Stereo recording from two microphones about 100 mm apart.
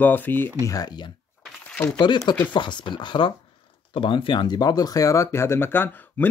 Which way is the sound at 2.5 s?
50° left (ahead or behind).